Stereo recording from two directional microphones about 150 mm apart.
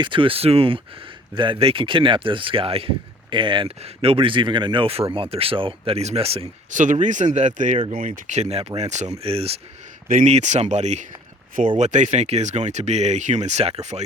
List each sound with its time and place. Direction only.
0.0 s speech: 35° right (ahead or behind)
6.7 s speech: 55° right (ahead or behind)
7.9 s speech: 65° right (ahead or behind); by 9.6 s 40° right (ahead or behind)
10.1 s speech: 55° right (ahead or behind)